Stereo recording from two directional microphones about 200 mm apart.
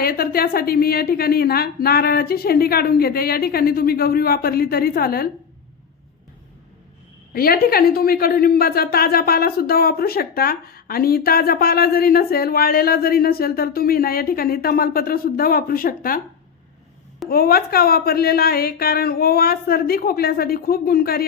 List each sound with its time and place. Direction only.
0.0 s a woman's voice: 50° left (ahead or behind)
7.3 s a woman's voice: 50° left (ahead or behind)
17.2 s a woman's voice: 50° left (ahead or behind)